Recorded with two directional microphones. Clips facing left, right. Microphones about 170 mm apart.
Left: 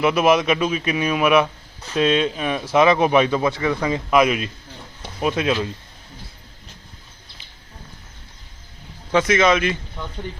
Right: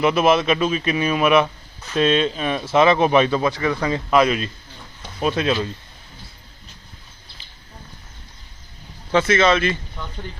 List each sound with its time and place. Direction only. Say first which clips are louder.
0.0 s speech: even; 10° left (ahead or behind)
9.1 s speech: even; 10° left (ahead or behind)